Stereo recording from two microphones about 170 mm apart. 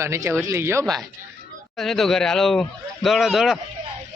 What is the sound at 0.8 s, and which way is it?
Speech, centre (ahead or behind).